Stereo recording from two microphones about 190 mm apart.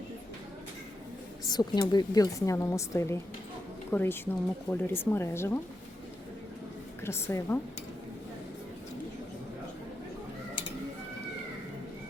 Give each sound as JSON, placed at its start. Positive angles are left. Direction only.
{"t": 1.5, "sound": "speech", "side_deg": 20}
{"t": 7.0, "sound": "speech", "side_deg": 15}